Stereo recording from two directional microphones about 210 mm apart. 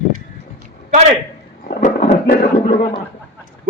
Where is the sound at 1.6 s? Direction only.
40° left (ahead or behind).